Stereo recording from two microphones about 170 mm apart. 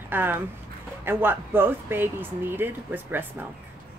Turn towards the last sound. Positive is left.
turn(degrees=-10)  # may be behind; listen again after turning